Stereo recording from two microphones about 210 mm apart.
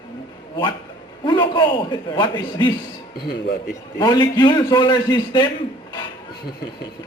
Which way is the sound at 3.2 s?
50° left (ahead or behind).